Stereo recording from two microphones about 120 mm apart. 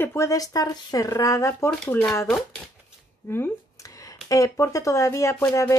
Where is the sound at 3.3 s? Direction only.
25° left (ahead or behind).